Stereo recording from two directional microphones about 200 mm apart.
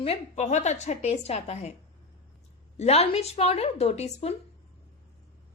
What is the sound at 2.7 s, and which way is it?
Speech, 30° left (ahead or behind).